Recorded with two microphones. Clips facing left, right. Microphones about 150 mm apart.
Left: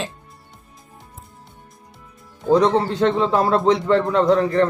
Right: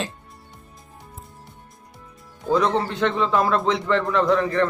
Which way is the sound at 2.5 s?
35° left (ahead or behind).